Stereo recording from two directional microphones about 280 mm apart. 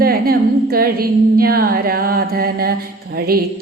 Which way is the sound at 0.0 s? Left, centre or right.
Right.